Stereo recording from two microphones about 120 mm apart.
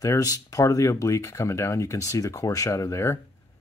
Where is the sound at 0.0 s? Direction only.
30° left (ahead or behind).